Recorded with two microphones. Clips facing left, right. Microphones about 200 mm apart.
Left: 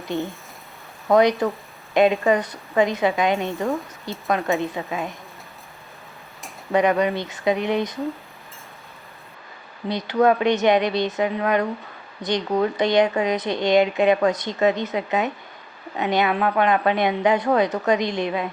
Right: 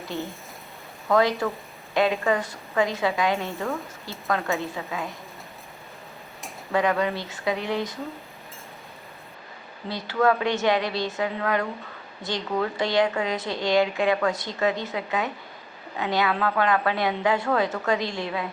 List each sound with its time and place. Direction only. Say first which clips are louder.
0.1 s a woman's voice: left 6 dB; 15° left (ahead or behind)
6.7 s speech: left 4 dB; 20° left (ahead or behind)
9.9 s speech: left 4 dB; 20° left (ahead or behind)